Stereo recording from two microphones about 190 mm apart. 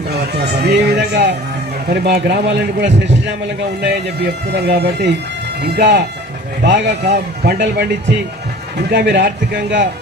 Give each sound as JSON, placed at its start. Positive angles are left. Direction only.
{"t": 0.1, "sound": "speech", "side_deg": -60}
{"t": 4.5, "sound": "speech", "side_deg": -60}
{"t": 8.9, "sound": "speech", "side_deg": -60}